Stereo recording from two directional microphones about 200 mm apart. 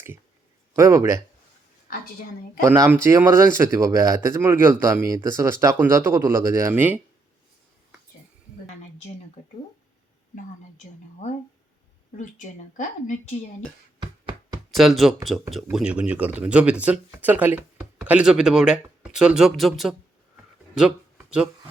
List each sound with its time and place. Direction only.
0.7 s speech: 15° right (ahead or behind)
2.6 s speech: 15° right (ahead or behind)
12.1 s a woman's voice: 40° left (ahead or behind)
14.0 s a sound: 20° right (ahead or behind)
14.7 s speech: centre (ahead or behind)